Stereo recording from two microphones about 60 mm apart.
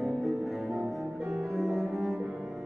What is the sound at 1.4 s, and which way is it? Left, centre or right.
Cello, centre.